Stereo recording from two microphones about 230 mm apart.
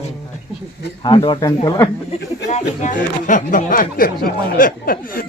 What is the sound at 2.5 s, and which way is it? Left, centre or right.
Speech, left.